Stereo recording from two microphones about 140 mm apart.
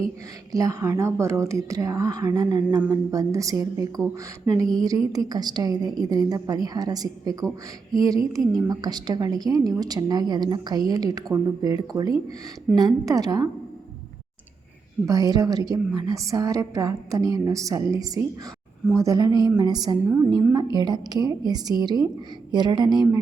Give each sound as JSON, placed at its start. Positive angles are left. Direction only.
{"t": 0.5, "sound": "a woman's voice", "side_deg": -25}
{"t": 15.0, "sound": "a woman's voice", "side_deg": -25}
{"t": 20.1, "sound": "a woman's voice", "side_deg": -20}